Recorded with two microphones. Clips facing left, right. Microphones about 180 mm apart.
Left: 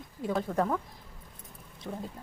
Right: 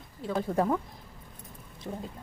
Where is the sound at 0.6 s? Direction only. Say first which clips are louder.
Right 3 dB; 10° right (ahead or behind).